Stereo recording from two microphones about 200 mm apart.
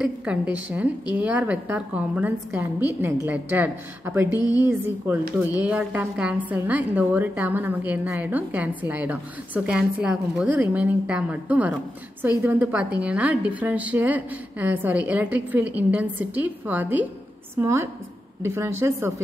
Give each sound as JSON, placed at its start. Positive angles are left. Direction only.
{"t": 0.0, "sound": "a woman's voice", "side_deg": -5}